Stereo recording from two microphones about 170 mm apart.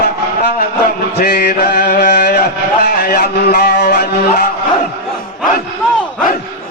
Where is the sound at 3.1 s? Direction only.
70° left (ahead or behind).